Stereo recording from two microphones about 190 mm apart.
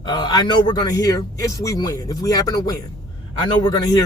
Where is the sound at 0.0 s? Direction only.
20° left (ahead or behind).